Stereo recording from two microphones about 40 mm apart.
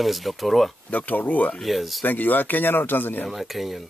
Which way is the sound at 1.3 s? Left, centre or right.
Left.